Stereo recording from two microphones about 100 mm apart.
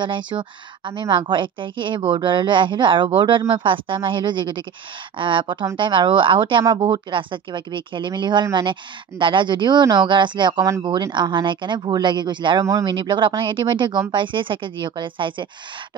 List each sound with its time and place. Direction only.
0.0 s a woman's voice: 55° right (ahead or behind)